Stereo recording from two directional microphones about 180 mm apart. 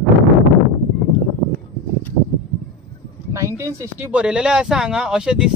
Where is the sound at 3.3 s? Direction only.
15° right (ahead or behind).